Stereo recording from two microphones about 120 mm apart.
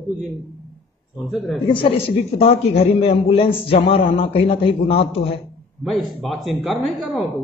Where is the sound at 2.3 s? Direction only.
55° left (ahead or behind).